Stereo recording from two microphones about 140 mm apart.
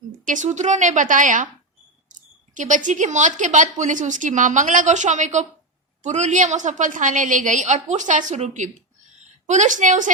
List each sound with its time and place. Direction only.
0.3 s speech: 60° right (ahead or behind)